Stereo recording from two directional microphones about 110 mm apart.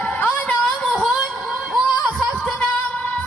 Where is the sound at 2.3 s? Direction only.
10° left (ahead or behind).